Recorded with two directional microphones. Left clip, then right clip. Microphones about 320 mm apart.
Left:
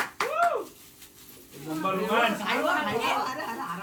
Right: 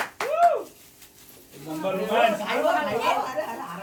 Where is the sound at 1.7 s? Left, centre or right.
Centre.